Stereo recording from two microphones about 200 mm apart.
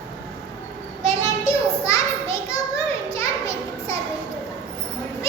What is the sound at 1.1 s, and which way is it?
Children playing, 15° left (ahead or behind).